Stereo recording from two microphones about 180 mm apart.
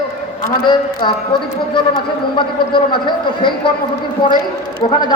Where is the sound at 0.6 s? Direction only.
25° left (ahead or behind).